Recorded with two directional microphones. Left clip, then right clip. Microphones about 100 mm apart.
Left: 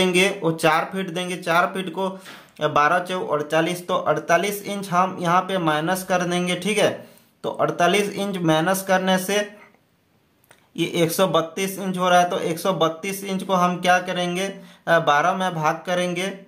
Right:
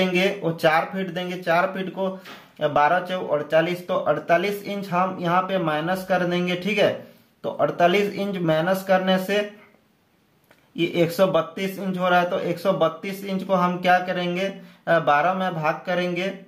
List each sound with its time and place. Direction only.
0.0 s speech: 45° left (ahead or behind)
10.8 s speech: 35° left (ahead or behind)